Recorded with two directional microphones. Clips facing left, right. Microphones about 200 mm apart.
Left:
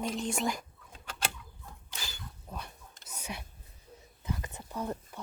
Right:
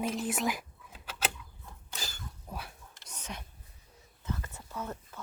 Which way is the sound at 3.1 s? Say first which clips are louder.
Left 2 dB; 10° left (ahead or behind).